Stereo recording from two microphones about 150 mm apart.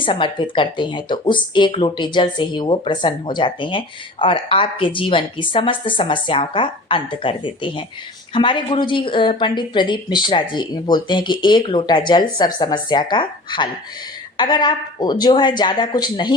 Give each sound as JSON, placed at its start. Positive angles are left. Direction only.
{"t": 0.0, "sound": "speech", "side_deg": 35}